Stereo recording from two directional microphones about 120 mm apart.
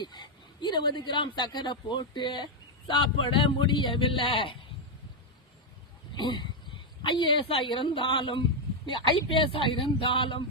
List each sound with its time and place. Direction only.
0.0 s speech: 40° left (ahead or behind)
6.1 s speech: 40° left (ahead or behind)